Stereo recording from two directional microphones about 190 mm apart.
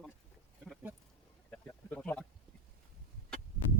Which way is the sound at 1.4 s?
10° left (ahead or behind).